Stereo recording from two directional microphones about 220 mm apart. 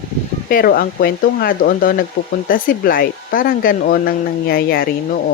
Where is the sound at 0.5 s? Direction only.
40° left (ahead or behind).